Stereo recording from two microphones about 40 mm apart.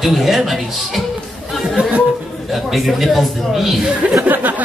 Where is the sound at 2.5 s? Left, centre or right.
Centre.